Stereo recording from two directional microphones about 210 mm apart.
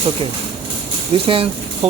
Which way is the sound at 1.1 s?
25° right (ahead or behind).